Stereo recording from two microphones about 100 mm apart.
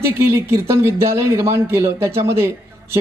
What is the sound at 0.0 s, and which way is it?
Speech, 25° right (ahead or behind).